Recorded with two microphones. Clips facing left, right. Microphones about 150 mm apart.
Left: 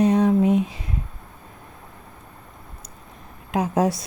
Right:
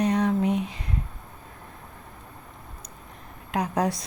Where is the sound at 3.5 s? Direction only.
20° left (ahead or behind).